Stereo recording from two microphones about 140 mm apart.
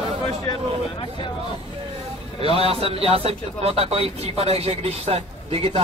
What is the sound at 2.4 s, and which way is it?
A man's voice, 45° right (ahead or behind).